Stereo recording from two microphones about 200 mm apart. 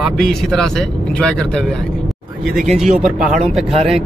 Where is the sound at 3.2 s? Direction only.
35° right (ahead or behind).